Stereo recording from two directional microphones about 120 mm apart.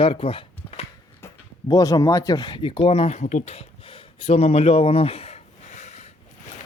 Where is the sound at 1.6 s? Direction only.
30° left (ahead or behind); by 3.2 s 55° left (ahead or behind).